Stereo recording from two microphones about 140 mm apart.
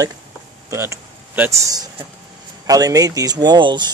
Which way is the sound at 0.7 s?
20° right (ahead or behind).